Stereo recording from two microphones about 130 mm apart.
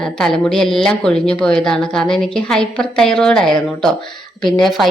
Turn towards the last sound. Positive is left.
turn(degrees=0)  # may be behind; listen again after turning